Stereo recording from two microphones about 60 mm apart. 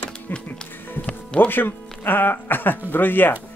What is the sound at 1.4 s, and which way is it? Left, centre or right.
Speech, left.